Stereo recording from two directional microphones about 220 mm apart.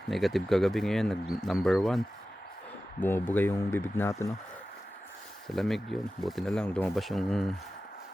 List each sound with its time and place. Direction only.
0.1 s speech: centre (ahead or behind)
5.5 s speech: centre (ahead or behind)